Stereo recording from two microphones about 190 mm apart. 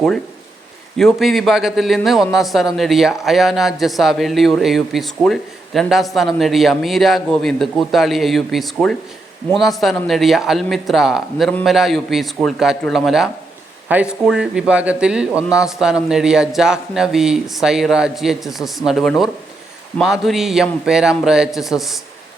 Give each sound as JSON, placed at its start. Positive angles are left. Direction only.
{"t": 0.9, "sound": "a man's voice", "side_deg": 0}